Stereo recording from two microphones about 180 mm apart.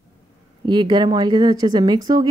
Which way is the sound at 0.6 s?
25° right (ahead or behind).